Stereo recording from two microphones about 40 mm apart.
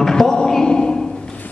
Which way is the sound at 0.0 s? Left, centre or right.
Centre.